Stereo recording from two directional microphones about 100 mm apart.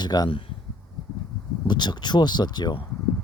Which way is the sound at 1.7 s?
45° left (ahead or behind).